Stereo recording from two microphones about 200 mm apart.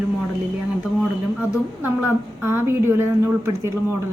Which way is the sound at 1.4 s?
10° right (ahead or behind).